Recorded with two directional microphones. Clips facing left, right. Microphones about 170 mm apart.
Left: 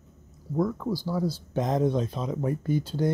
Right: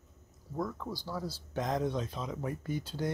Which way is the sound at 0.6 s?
10° left (ahead or behind).